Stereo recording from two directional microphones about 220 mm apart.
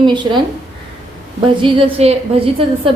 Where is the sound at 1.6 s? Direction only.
25° right (ahead or behind).